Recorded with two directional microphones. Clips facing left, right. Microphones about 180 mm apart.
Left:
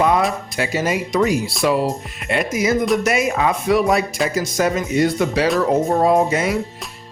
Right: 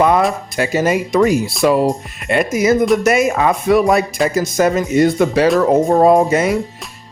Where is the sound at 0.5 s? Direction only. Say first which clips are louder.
Right 5 dB; 45° right (ahead or behind).